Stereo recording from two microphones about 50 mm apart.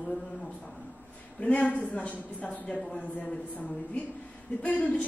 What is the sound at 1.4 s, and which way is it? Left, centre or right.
A woman's voice, left.